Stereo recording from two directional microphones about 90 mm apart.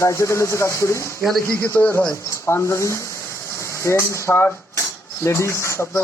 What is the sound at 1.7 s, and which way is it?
Speech, 20° left (ahead or behind).